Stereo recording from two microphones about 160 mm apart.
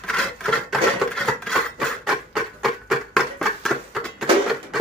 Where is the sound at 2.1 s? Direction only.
Centre (ahead or behind).